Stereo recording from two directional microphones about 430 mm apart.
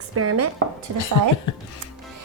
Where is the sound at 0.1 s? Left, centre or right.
Right.